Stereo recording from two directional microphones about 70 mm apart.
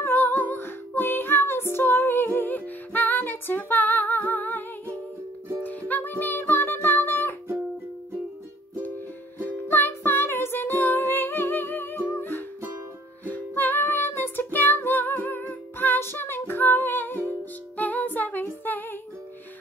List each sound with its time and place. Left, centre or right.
0.0 s music: left
9.4 s music: left